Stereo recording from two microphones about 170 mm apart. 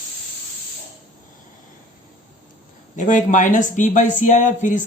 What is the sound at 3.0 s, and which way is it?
Speech, 50° left (ahead or behind).